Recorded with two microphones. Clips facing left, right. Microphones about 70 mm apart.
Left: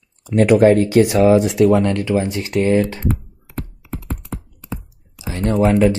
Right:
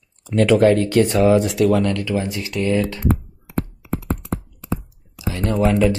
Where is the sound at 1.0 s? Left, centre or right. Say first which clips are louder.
Left 1 dB; left.